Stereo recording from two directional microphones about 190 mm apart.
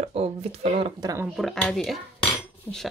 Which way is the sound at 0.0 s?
35° right (ahead or behind).